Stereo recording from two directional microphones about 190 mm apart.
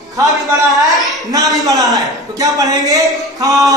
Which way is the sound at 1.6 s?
20° right (ahead or behind).